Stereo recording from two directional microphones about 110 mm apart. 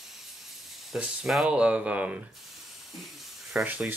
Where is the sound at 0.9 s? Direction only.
5° right (ahead or behind).